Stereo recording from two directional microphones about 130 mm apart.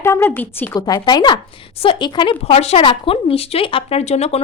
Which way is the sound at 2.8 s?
40° left (ahead or behind).